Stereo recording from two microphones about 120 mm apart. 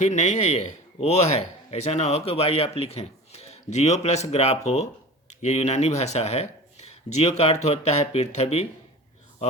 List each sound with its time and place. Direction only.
0.0 s a man's voice: 75° left (ahead or behind)